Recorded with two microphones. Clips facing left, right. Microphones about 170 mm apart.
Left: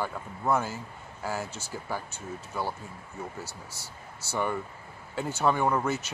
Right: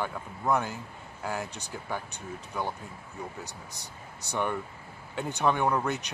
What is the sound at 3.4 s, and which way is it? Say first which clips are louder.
Speech: left 1 dB; 15° right (ahead or behind).